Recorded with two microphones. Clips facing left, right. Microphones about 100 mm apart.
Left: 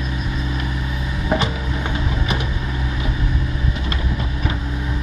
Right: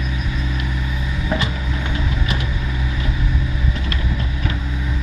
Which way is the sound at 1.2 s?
25° left (ahead or behind).